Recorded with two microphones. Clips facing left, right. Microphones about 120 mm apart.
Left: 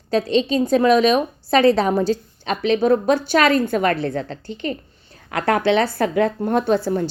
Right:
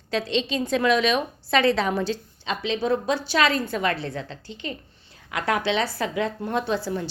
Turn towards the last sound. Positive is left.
turn(degrees=50)  # may be behind; listen again after turning